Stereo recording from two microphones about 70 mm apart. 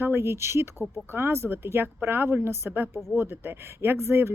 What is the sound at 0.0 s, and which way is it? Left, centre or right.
Speech, right.